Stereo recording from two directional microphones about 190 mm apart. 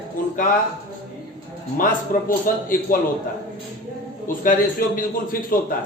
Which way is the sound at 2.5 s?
45° left (ahead or behind).